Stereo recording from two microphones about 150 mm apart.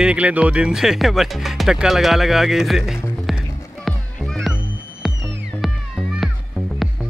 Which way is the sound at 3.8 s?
5° left (ahead or behind).